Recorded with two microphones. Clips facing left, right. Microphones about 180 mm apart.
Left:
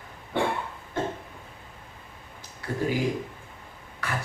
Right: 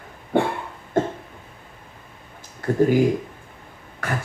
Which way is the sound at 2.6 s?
45° right (ahead or behind).